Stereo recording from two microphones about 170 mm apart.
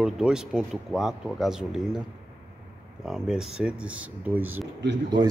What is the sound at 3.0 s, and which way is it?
Speech, 5° right (ahead or behind).